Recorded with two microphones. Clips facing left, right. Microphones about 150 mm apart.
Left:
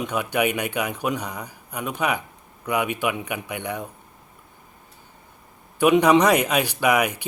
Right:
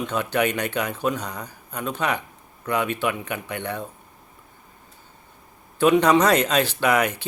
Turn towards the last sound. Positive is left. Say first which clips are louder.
# even
turn(degrees=10)  # may be behind; listen again after turning